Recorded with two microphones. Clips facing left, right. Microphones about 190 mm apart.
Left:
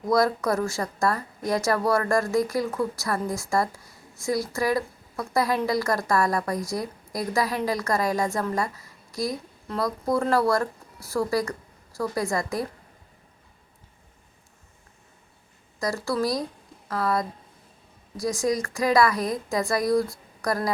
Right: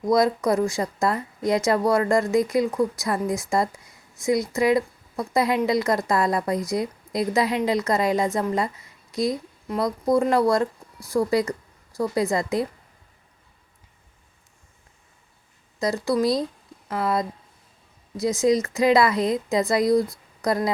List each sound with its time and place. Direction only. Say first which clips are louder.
0.0 s a woman's voice: right 2 dB; 20° right (ahead or behind)
16.0 s a woman's voice: right 5 dB; 20° right (ahead or behind)